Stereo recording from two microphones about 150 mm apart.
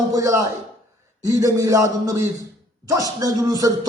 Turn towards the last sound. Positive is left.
turn(degrees=-25)  # may be behind; listen again after turning